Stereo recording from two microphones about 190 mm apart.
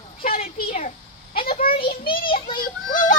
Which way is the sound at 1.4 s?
50° left (ahead or behind).